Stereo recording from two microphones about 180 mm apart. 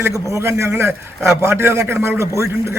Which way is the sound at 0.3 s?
15° right (ahead or behind).